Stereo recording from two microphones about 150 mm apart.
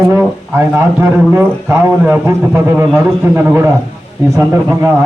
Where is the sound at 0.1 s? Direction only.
15° right (ahead or behind).